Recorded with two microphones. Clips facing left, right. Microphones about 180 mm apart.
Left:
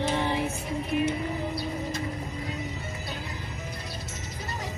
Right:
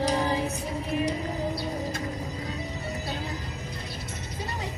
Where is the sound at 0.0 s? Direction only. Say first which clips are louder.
Right 1 dB; 40° right (ahead or behind).